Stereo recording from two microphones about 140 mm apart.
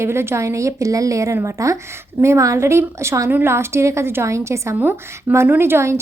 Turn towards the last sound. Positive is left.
turn(degrees=-20)  # may be behind; listen again after turning